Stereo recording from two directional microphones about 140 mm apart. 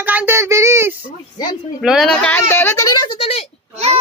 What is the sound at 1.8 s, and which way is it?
Speech, 5° right (ahead or behind).